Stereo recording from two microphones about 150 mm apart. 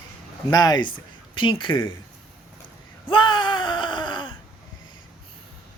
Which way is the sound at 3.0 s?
35° left (ahead or behind).